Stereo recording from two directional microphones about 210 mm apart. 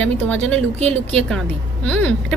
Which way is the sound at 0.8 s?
30° right (ahead or behind).